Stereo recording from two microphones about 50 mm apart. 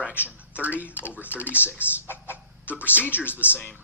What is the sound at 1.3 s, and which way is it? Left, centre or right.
Speech, left.